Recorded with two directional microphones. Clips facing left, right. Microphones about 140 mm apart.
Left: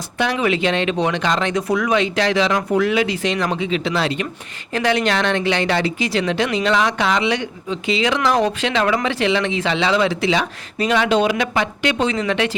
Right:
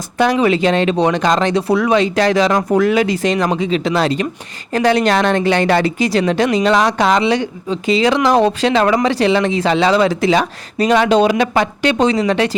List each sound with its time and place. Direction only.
0.2 s speech: 40° right (ahead or behind)